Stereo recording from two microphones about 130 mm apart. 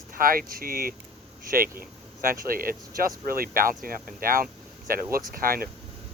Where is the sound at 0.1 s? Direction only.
90° right.